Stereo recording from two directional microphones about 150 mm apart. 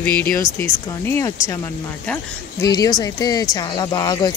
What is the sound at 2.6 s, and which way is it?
Speech, 25° left (ahead or behind).